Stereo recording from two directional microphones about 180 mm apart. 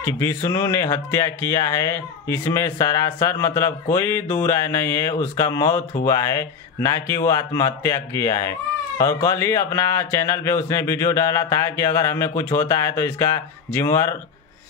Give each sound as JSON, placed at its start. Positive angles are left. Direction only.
{"t": 0.0, "sound": "speech", "side_deg": 15}